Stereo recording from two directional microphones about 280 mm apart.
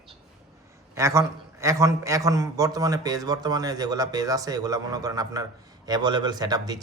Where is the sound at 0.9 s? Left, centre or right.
Centre.